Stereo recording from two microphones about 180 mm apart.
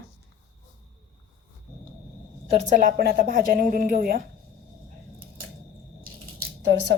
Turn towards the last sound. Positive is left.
turn(degrees=-65)  # may be behind; listen again after turning